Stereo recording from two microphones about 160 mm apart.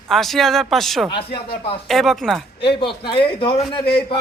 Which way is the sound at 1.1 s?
35° left (ahead or behind).